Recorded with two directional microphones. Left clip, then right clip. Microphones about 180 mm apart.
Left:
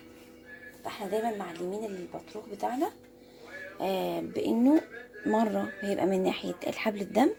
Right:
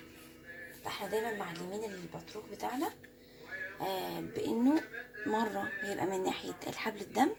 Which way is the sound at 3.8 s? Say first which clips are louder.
Left 8 dB; 40° left (ahead or behind).